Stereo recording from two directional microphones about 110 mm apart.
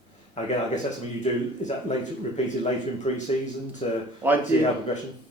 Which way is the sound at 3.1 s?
65° left (ahead or behind).